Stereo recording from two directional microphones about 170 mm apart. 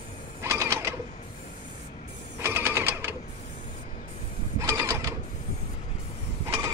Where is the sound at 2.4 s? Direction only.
15° right (ahead or behind).